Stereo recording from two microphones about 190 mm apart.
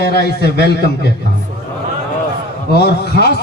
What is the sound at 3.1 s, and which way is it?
Speech, 60° left (ahead or behind).